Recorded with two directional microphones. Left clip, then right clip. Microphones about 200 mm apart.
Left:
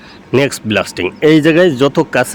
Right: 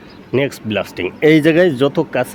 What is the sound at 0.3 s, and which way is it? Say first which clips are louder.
Speech: left 5 dB; 20° left (ahead or behind).